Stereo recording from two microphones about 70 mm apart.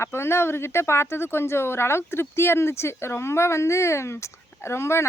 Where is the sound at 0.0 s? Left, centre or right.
Left.